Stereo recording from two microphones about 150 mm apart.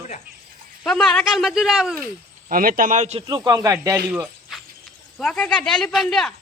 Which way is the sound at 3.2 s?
25° right (ahead or behind).